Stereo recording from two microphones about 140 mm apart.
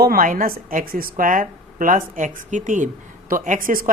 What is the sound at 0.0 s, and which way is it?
A woman's voice, 85° right.